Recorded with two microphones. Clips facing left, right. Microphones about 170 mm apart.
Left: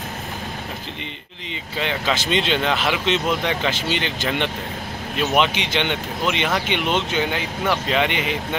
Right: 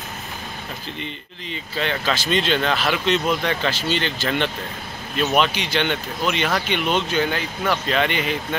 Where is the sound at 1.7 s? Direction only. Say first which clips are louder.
Even; 20° left (ahead or behind).